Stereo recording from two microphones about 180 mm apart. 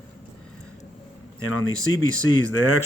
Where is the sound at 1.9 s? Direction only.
90° left.